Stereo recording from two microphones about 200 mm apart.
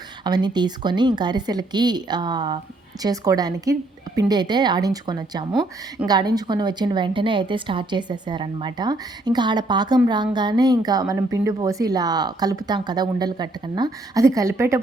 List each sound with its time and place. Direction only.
0.3 s a woman's voice: 20° right (ahead or behind)